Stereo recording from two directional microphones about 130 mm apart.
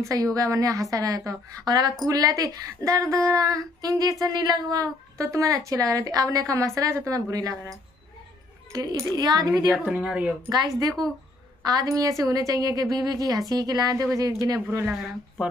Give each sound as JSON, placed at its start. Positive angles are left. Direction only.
{"t": 0.0, "sound": "a woman's voice", "side_deg": -25}
{"t": 9.7, "sound": "speech", "side_deg": -5}
{"t": 10.5, "sound": "a woman's voice", "side_deg": -30}